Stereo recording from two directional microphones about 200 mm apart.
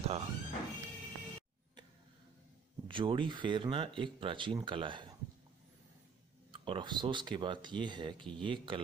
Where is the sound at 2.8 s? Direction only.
25° right (ahead or behind).